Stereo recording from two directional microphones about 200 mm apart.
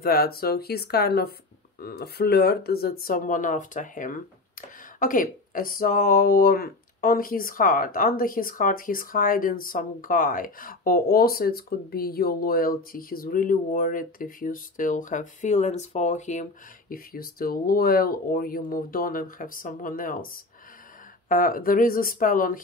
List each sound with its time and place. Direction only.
0.0 s speech: 50° left (ahead or behind)
21.3 s speech: 45° left (ahead or behind)